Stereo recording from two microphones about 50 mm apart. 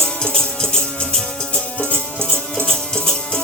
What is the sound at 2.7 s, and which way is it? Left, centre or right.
Music, centre.